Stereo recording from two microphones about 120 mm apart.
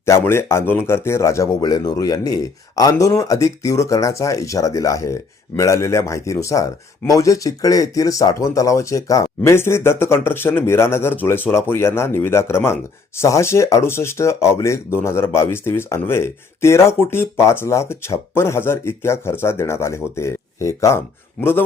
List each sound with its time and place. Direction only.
0.0 s speech: 20° left (ahead or behind)